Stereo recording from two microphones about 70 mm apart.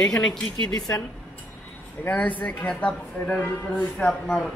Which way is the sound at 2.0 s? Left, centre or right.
Left.